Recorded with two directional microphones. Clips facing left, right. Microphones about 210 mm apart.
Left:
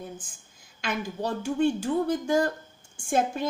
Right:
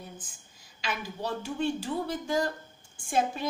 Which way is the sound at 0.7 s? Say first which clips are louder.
Left 5 dB; 50° left (ahead or behind).